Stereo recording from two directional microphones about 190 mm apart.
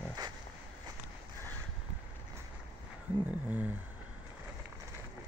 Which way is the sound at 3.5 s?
10° right (ahead or behind).